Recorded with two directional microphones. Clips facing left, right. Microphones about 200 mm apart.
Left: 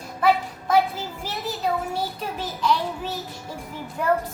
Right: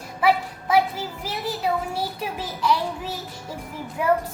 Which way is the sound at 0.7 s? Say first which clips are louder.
Even; 10° right (ahead or behind).